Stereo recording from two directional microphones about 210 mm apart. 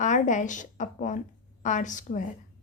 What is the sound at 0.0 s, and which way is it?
A woman's voice, 35° left (ahead or behind).